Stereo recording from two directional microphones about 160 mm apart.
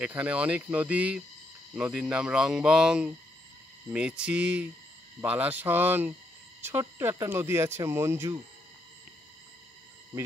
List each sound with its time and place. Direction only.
0.0 s speech: 10° right (ahead or behind)